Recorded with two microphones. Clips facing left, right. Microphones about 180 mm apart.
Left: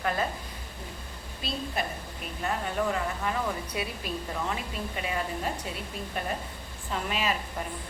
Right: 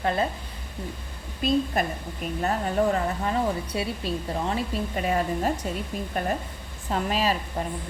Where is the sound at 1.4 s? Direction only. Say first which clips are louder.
Right 9 dB; 50° right (ahead or behind).